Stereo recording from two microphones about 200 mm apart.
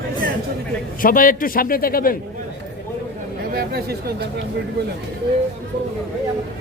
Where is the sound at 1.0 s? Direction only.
45° left (ahead or behind).